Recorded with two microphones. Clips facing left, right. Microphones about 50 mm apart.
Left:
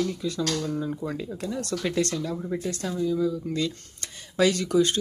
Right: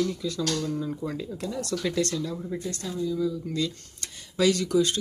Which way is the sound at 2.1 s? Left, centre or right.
Left.